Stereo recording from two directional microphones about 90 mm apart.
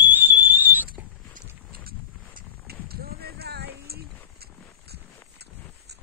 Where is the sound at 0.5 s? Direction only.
20° right (ahead or behind).